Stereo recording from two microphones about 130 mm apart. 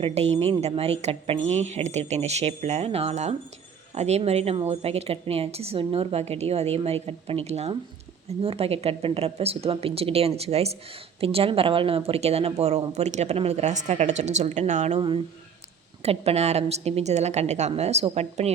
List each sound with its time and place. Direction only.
0.0 s a woman's voice: 55° right (ahead or behind)
16.0 s a woman's voice: 55° right (ahead or behind)